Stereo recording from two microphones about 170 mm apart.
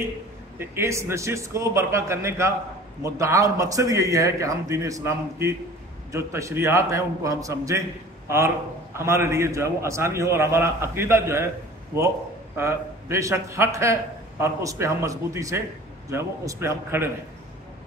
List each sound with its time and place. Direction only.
0.6 s a man's voice: 15° right (ahead or behind)
12.5 s a man's voice: 15° right (ahead or behind)